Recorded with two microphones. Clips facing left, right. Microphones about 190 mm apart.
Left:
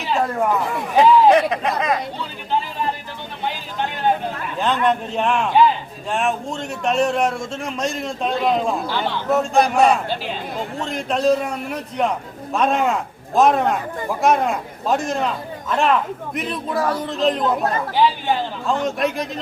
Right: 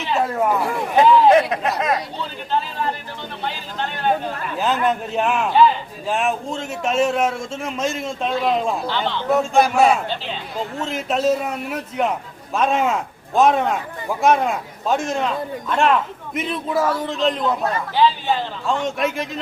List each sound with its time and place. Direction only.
0.1 s speech: centre (ahead or behind)
3.4 s vehicle: 15° left (ahead or behind)
4.6 s speech: 5° right (ahead or behind)
8.9 s a man's voice: 10° left (ahead or behind)
9.3 s speech: centre (ahead or behind)
18.9 s speech: centre (ahead or behind)